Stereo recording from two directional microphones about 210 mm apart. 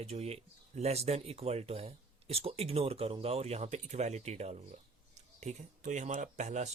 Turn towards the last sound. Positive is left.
turn(degrees=-35)  # may be behind; listen again after turning